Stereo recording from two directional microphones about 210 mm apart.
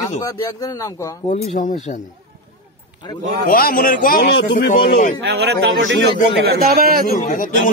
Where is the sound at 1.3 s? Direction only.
35° left (ahead or behind).